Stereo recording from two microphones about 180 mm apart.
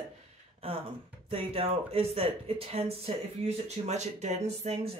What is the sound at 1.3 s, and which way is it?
Speech, 30° right (ahead or behind).